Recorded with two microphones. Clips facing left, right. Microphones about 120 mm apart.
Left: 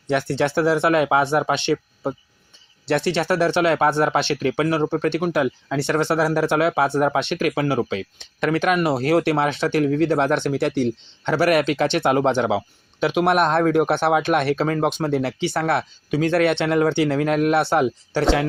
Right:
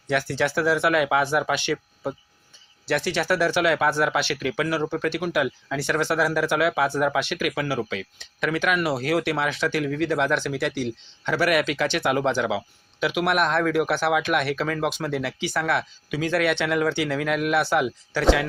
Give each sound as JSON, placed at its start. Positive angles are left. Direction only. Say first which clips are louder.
{"t": 0.1, "sound": "speech", "louder": "left 3 dB", "side_deg": 25}